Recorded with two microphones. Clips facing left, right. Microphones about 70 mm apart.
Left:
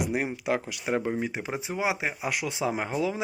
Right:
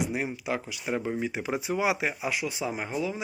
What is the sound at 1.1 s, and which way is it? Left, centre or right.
Speech, left.